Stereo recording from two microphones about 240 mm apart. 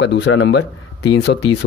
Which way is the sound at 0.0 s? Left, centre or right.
Left.